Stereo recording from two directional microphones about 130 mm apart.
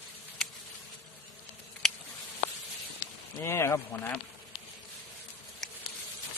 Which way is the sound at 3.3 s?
20° left (ahead or behind).